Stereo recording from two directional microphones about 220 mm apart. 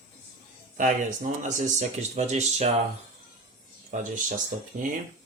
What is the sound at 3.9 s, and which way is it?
Speech, 35° right (ahead or behind).